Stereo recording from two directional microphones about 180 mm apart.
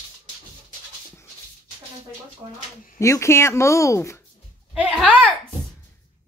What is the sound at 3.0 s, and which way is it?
Speech, 15° left (ahead or behind).